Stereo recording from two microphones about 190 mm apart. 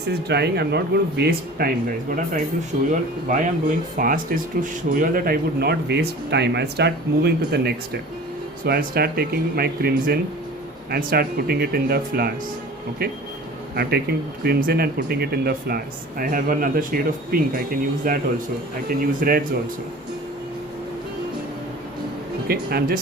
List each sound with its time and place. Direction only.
0.1 s speech: 60° right (ahead or behind)
13.7 s speech: 55° right (ahead or behind)
22.4 s speech: 50° right (ahead or behind)